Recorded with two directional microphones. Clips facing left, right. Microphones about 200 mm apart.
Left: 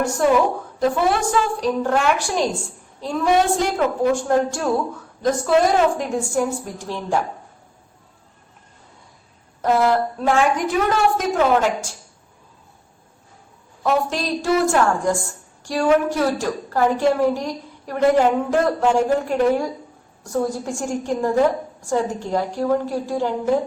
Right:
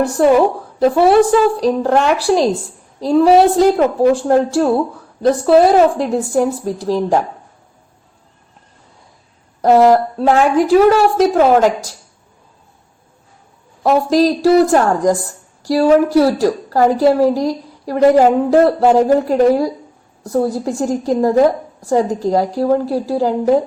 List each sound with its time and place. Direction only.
1.6 s speech: 35° right (ahead or behind)
9.6 s speech: 35° right (ahead or behind)
13.8 s speech: 35° right (ahead or behind)